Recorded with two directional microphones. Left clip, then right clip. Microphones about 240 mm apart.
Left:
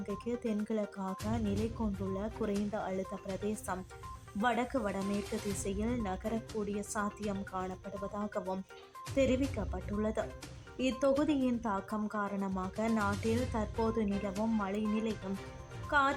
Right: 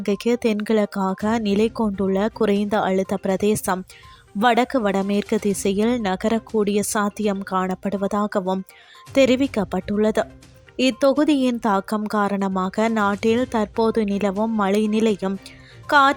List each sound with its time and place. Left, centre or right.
0.0 s speech: right